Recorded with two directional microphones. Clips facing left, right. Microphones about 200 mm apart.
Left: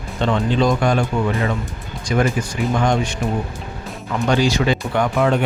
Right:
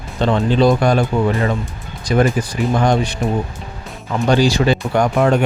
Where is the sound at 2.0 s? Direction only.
35° right (ahead or behind).